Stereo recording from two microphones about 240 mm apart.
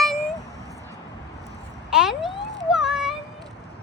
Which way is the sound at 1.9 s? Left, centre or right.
Centre.